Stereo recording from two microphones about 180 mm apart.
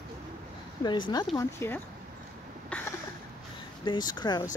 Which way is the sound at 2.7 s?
10° left (ahead or behind).